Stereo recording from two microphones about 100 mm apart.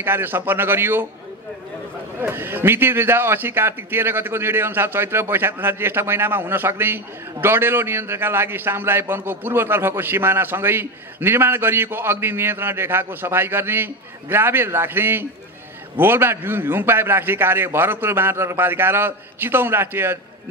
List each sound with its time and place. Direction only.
0.0 s a man's voice: 20° right (ahead or behind)
2.1 s a man's voice: 20° right (ahead or behind)